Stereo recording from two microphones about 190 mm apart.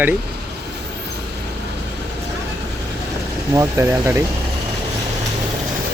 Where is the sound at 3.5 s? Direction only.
15° right (ahead or behind).